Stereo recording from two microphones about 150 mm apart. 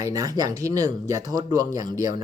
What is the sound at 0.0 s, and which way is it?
Speech, 25° right (ahead or behind).